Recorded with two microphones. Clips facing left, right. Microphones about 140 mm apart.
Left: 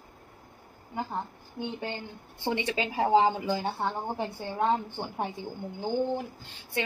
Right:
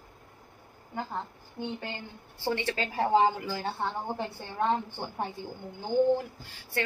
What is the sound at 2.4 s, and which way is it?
Speech, 20° left (ahead or behind).